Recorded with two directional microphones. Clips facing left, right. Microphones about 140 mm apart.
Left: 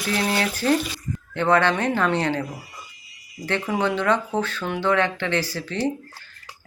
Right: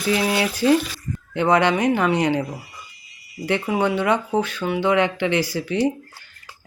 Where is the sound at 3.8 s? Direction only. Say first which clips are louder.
Even; 10° right (ahead or behind).